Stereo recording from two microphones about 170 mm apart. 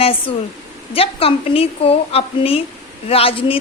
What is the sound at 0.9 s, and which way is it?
A woman's voice, 35° left (ahead or behind).